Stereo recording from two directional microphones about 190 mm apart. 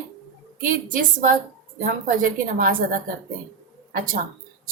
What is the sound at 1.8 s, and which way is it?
Speech, 45° right (ahead or behind).